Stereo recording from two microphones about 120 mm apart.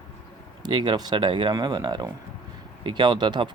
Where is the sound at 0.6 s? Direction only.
40° right (ahead or behind).